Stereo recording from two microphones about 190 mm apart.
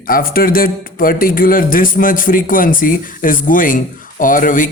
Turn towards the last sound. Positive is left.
turn(degrees=45)  # may be behind; listen again after turning